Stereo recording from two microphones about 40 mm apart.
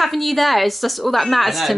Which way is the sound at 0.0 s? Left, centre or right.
Centre.